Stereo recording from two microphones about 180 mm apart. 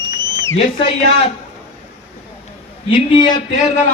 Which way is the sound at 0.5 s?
30° left (ahead or behind).